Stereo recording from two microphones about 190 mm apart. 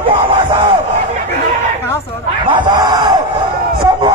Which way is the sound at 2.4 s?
25° right (ahead or behind).